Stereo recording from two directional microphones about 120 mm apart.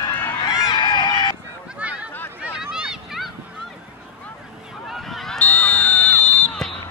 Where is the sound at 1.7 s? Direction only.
10° right (ahead or behind).